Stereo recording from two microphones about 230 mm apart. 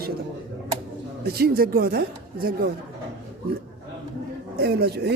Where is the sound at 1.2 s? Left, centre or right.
Right.